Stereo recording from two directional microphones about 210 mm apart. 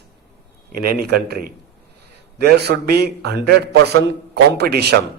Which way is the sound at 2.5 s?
50° right (ahead or behind).